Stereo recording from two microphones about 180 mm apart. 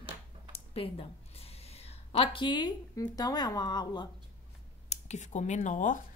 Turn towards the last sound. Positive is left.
turn(degrees=45)  # may be behind; listen again after turning